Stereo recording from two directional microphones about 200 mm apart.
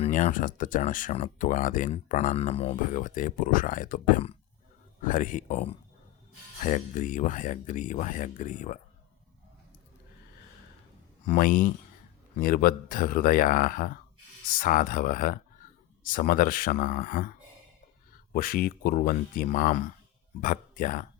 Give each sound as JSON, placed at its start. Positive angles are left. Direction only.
{"t": 0.0, "sound": "speech", "side_deg": 35}
{"t": 11.3, "sound": "speech", "side_deg": 40}
{"t": 18.3, "sound": "speech", "side_deg": 45}